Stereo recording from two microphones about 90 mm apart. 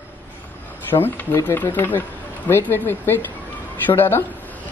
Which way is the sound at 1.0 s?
25° left (ahead or behind).